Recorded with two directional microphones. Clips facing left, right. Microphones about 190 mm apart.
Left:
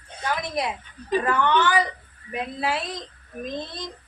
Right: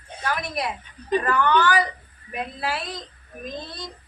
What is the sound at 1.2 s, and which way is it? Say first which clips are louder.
Speech: right 1 dB; 20° left (ahead or behind).